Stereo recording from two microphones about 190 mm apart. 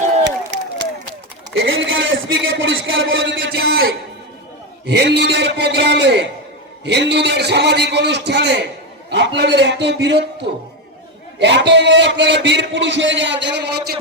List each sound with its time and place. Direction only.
0.3 s a sound: 70° right (ahead or behind)
1.5 s a man's voice: 90° right; by 10.2 s 65° right (ahead or behind)
11.3 s a man's voice: 65° right (ahead or behind)